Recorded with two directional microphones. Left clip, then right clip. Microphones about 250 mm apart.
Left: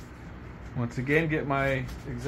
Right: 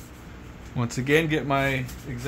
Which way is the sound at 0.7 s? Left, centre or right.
Right.